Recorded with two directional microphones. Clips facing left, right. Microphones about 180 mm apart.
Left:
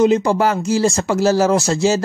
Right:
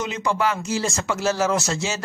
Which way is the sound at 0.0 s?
40° left (ahead or behind).